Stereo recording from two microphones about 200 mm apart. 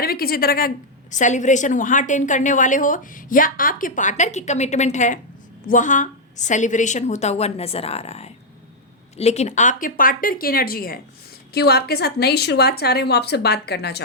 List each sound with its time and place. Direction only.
0.0 s a woman's voice: 50° left (ahead or behind)